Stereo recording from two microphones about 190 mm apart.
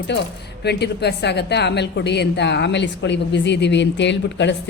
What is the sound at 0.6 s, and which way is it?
A woman's voice, 60° left (ahead or behind).